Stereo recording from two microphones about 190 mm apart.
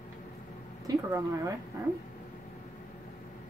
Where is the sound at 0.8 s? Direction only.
15° right (ahead or behind).